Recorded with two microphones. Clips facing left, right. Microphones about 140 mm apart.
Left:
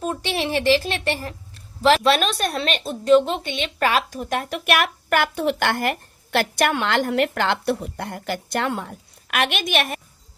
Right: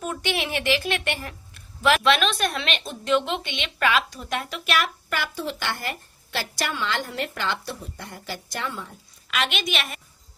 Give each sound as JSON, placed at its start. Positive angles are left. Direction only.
{"t": 0.0, "sound": "a woman's voice", "side_deg": 30}